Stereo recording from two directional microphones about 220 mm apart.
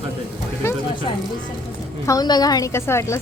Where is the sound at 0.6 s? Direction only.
20° left (ahead or behind).